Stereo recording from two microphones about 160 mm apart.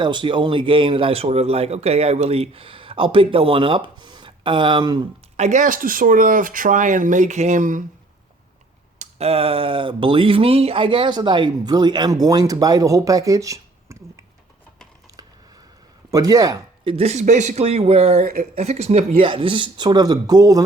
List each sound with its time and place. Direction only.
0.0 s a man's voice: 30° right (ahead or behind)
5.4 s speech: 50° right (ahead or behind)
9.0 s speech: 40° right (ahead or behind); by 14.0 s 20° right (ahead or behind)
16.1 s speech: 20° right (ahead or behind)
16.9 s a man's voice: 40° right (ahead or behind)
18.2 s speech: 65° right (ahead or behind)
18.5 s speech: 40° right (ahead or behind); by 20.6 s 25° right (ahead or behind)